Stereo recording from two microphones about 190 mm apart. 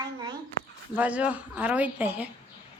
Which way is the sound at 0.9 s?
5° right (ahead or behind).